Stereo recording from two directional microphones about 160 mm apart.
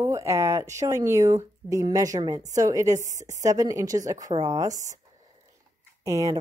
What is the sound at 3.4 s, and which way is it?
Speech, 20° right (ahead or behind).